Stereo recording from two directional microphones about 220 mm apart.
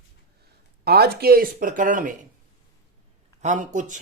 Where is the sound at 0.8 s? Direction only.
45° right (ahead or behind).